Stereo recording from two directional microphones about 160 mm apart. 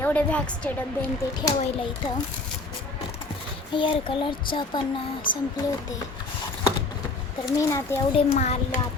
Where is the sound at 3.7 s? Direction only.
30° left (ahead or behind).